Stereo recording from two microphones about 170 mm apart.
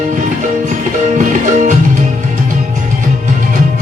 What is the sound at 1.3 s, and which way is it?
Music, 50° right (ahead or behind).